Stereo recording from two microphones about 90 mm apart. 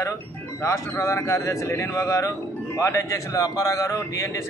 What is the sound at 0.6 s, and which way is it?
A man's voice, 30° left (ahead or behind).